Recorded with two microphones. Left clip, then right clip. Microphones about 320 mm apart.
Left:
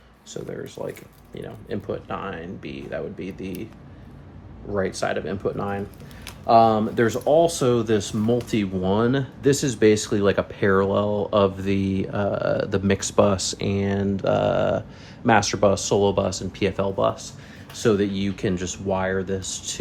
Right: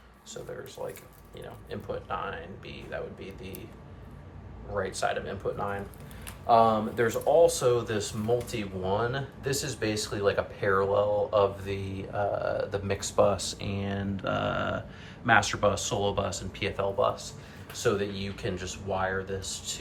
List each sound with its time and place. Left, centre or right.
1.7 s speech: left
4.7 s speech: left